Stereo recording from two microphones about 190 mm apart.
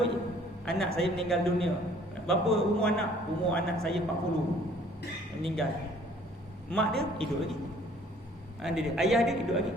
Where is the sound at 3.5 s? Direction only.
5° left (ahead or behind).